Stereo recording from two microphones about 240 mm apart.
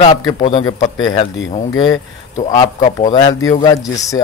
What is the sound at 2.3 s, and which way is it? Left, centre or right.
Speech, left.